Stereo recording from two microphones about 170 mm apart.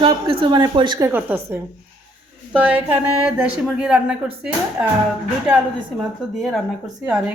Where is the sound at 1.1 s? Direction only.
15° right (ahead or behind).